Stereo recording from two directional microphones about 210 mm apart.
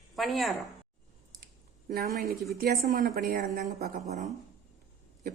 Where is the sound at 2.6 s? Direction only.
45° right (ahead or behind).